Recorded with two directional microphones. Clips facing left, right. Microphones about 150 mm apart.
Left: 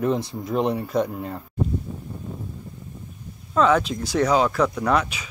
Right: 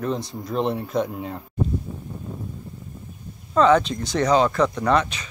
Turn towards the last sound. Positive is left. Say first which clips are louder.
# right 1 dB
turn(degrees=5)  # may be behind; listen again after turning